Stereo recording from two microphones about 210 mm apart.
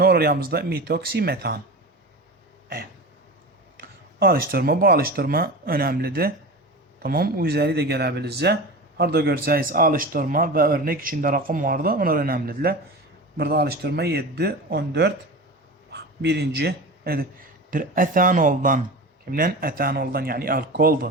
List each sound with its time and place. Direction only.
0.0 s speech: 45° right (ahead or behind)
3.8 s a man's voice: 45° right (ahead or behind)